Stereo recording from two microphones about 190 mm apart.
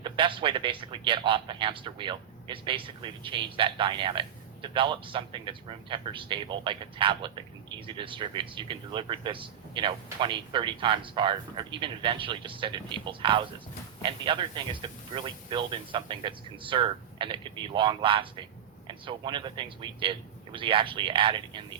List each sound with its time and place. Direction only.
0.0 s a man's voice: 25° right (ahead or behind)